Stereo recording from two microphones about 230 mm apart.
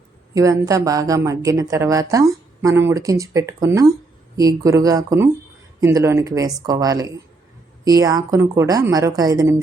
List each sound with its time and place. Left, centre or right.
0.3 s a woman's voice: centre